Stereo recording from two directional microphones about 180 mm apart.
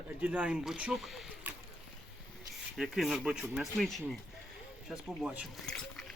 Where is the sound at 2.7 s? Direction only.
Centre (ahead or behind).